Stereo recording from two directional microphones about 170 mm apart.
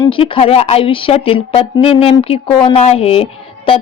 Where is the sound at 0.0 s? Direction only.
30° left (ahead or behind).